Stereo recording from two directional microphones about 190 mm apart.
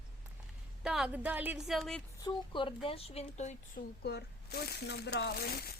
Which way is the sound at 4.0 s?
60° left (ahead or behind).